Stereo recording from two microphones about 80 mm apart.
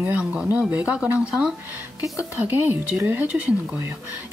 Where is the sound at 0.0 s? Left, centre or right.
Centre.